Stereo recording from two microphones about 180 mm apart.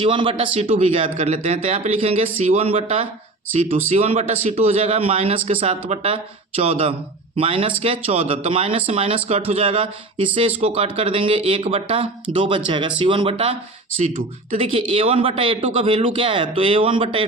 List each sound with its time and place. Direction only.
0.0 s a man's voice: 25° right (ahead or behind)
14.0 s speech: 45° right (ahead or behind)
14.6 s a man's voice: 30° right (ahead or behind)